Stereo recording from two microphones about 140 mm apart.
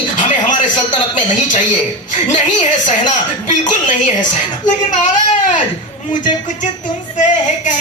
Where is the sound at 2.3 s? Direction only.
60° left (ahead or behind).